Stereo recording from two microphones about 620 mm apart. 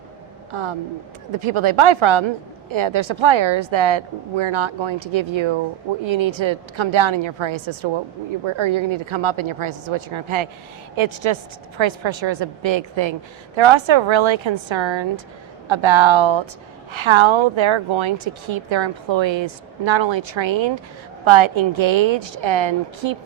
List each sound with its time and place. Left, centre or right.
0.5 s a woman's voice: right